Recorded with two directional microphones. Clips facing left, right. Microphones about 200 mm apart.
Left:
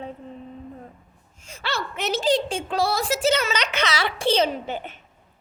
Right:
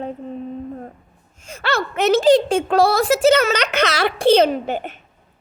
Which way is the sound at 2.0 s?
70° right (ahead or behind).